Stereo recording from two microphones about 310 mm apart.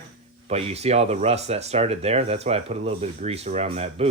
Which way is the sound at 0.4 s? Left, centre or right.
Centre.